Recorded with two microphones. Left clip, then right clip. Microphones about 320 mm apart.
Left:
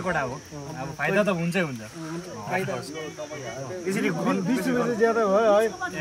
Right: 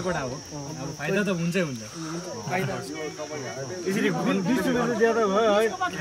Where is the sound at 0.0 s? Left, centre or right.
Centre.